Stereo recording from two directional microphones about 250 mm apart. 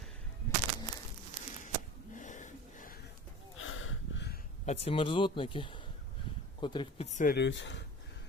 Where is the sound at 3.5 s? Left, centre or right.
Left.